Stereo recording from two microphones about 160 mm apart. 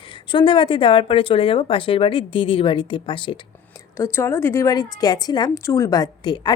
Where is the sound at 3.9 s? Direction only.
15° left (ahead or behind).